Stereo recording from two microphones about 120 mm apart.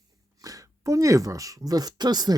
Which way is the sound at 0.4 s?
30° right (ahead or behind).